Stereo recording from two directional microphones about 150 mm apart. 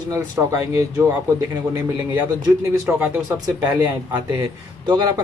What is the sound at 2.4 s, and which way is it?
Speech, 25° right (ahead or behind).